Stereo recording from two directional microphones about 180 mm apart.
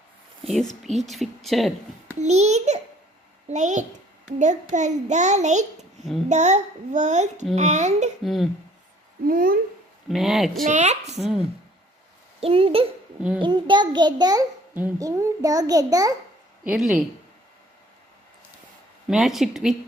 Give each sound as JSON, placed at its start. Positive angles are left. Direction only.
{"t": 0.4, "sound": "speech", "side_deg": 0}
{"t": 2.1, "sound": "a child's voice", "side_deg": -40}
{"t": 8.2, "sound": "speech", "side_deg": 0}
{"t": 9.2, "sound": "speech", "side_deg": -55}
{"t": 10.1, "sound": "speech", "side_deg": 0}
{"t": 10.6, "sound": "a child's voice", "side_deg": -40}
{"t": 12.4, "sound": "a child's voice", "side_deg": -30}
{"t": 16.6, "sound": "speech", "side_deg": -5}
{"t": 19.0, "sound": "speech", "side_deg": 0}